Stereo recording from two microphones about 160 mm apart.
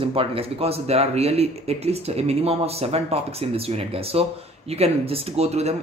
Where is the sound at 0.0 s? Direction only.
35° right (ahead or behind).